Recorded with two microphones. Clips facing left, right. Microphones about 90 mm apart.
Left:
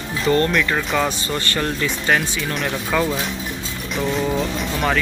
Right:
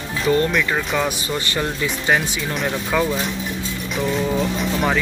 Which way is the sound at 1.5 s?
15° right (ahead or behind).